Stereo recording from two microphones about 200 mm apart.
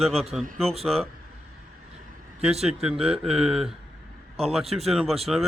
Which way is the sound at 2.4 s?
30° right (ahead or behind).